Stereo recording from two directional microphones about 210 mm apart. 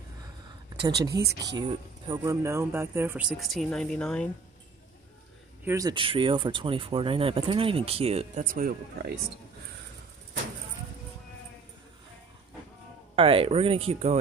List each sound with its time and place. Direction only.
1.0 s speech: 15° right (ahead or behind); by 4.3 s 5° left (ahead or behind)
5.7 s speech: 15° right (ahead or behind)
8.5 s speech: 45° right (ahead or behind)
13.1 s speech: 25° right (ahead or behind)